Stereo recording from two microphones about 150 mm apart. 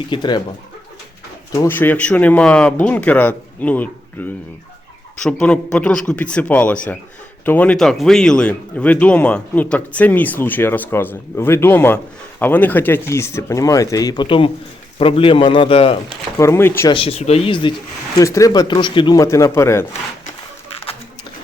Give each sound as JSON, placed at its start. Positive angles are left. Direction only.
{"t": 0.1, "sound": "speech", "side_deg": 30}
{"t": 1.5, "sound": "a man's voice", "side_deg": 15}
{"t": 16.4, "sound": "speech", "side_deg": 15}
{"t": 16.9, "sound": "a man's voice", "side_deg": 40}
{"t": 18.2, "sound": "speech", "side_deg": 20}